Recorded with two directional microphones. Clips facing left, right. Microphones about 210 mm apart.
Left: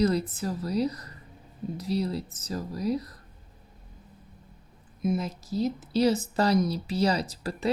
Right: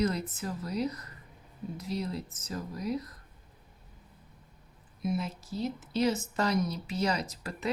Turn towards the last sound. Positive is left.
turn(degrees=35)  # may be behind; listen again after turning